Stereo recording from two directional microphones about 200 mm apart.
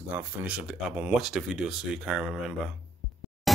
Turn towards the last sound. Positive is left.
turn(degrees=0)  # may be behind; listen again after turning